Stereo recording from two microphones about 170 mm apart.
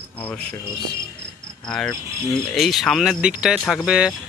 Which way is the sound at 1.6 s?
5° left (ahead or behind).